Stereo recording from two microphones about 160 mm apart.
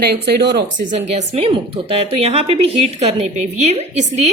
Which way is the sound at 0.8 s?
45° right (ahead or behind).